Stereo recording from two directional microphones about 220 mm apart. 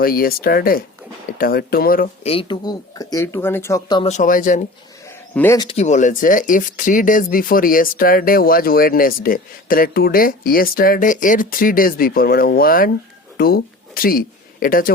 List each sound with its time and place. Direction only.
0.0 s speech: 40° left (ahead or behind)
2.2 s speech: 25° left (ahead or behind)
4.1 s speech: 35° left (ahead or behind)
5.0 s bird: 10° left (ahead or behind)
5.6 s speech: 30° left (ahead or behind)